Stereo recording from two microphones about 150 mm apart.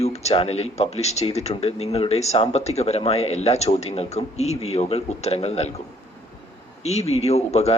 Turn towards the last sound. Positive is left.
turn(degrees=45)  # may be behind; listen again after turning